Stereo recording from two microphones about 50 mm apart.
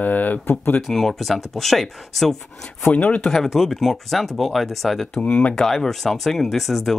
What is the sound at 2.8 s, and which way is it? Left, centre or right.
Speech, left.